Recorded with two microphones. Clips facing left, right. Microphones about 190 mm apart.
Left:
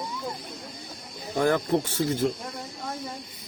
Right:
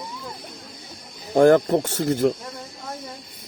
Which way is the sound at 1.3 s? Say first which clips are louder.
Right 8 dB; 50° right (ahead or behind).